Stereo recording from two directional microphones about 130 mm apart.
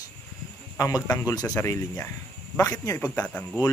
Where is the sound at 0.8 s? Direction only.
25° left (ahead or behind).